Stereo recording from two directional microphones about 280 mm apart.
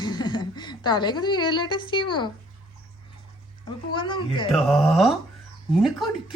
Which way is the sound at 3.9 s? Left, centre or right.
Centre.